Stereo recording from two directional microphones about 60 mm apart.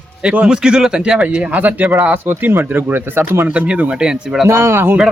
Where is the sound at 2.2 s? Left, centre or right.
Right.